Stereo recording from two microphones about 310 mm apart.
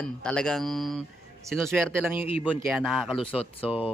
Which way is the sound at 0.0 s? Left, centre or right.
Centre.